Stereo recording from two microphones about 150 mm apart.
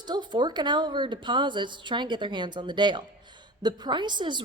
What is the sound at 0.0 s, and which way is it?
A woman's voice, 30° right (ahead or behind).